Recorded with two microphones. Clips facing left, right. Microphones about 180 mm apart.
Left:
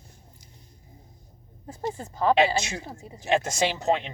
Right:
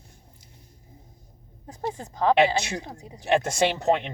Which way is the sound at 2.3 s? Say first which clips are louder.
Right 1 dB; 60° right (ahead or behind).